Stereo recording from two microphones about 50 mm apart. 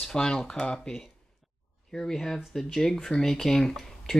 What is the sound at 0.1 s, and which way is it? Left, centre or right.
Speech, centre.